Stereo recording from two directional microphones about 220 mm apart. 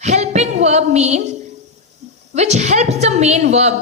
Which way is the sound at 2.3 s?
30° right (ahead or behind).